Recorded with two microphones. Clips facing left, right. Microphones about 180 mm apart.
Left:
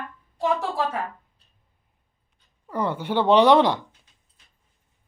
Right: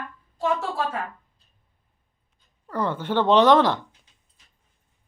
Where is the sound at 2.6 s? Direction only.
10° left (ahead or behind).